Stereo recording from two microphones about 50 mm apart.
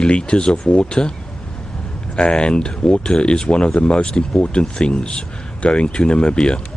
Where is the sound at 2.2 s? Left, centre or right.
Centre.